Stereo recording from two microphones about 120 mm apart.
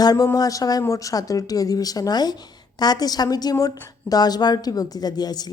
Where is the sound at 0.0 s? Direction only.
35° left (ahead or behind).